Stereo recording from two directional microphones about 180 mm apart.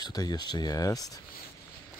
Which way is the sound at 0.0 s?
20° left (ahead or behind).